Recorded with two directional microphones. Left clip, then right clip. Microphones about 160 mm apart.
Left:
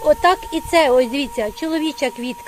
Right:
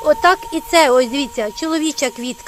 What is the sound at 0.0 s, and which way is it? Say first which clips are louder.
Speech: right 1 dB; 10° right (ahead or behind).